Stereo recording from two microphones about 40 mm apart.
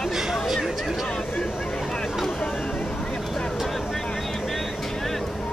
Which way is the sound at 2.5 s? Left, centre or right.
Centre.